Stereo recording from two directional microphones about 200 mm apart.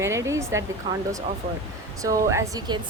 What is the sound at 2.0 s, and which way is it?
Speech, 15° right (ahead or behind).